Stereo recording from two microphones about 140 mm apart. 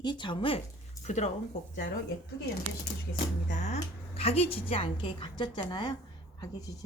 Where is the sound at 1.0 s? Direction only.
55° left (ahead or behind).